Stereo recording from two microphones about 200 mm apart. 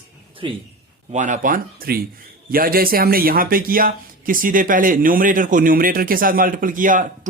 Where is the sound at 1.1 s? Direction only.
35° right (ahead or behind).